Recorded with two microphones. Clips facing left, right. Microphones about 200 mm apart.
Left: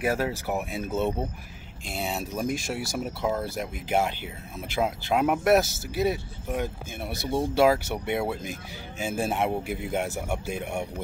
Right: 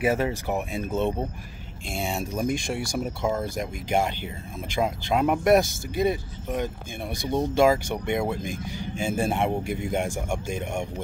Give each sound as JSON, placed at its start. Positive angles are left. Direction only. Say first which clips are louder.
{"t": 0.0, "sound": "speech", "louder": "right 2 dB", "side_deg": 0}